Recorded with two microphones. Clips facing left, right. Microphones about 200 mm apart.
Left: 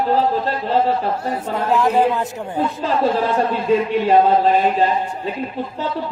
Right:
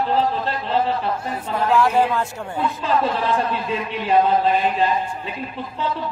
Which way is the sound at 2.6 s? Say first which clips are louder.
Left 2 dB; 40° left (ahead or behind).